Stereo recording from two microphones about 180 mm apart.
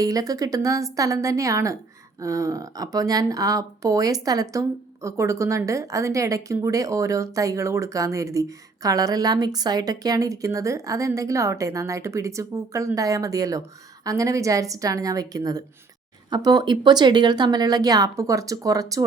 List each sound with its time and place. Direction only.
0.0 s speech: 20° right (ahead or behind)